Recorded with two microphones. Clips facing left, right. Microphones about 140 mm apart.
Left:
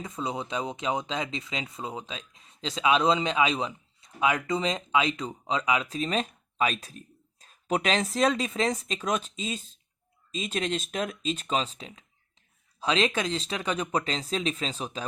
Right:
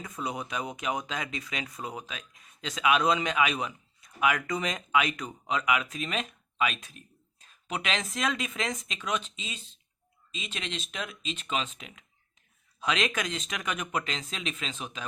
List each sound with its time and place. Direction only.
0.0 s speech: 25° left (ahead or behind)